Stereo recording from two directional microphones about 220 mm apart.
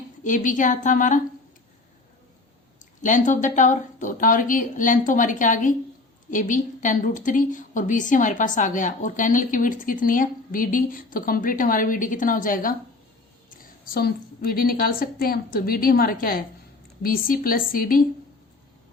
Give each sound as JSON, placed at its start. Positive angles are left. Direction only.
{"t": 0.3, "sound": "a woman's voice", "side_deg": 35}
{"t": 3.0, "sound": "a woman's voice", "side_deg": 35}
{"t": 13.8, "sound": "a woman's voice", "side_deg": 45}